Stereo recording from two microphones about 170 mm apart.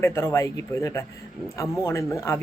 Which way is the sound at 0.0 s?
15° left (ahead or behind).